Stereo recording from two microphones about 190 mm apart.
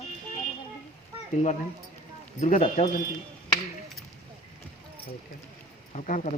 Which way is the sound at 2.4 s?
35° left (ahead or behind).